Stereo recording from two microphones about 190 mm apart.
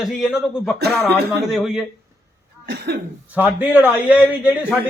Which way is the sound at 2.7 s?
60° right (ahead or behind).